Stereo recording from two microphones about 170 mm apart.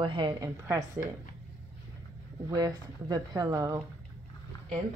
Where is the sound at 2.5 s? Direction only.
20° right (ahead or behind).